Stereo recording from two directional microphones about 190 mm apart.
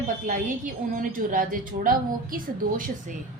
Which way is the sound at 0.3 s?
45° right (ahead or behind).